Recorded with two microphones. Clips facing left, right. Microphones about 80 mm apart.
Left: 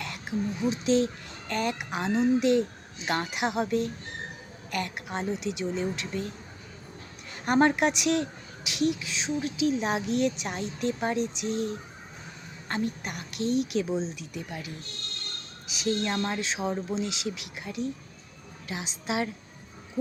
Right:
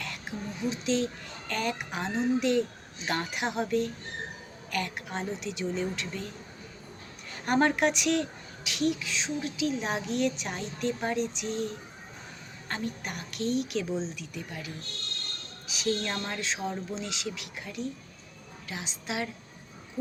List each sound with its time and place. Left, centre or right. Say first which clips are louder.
0.0 s speech: left 6 dB; centre
7.4 s a woman's voice: left 2 dB; centre
11.4 s speech: left 2 dB; right
12.6 s speech: left 4 dB; centre
13.4 s speech: left 3 dB; right
13.8 s a woman's voice: left 2 dB; centre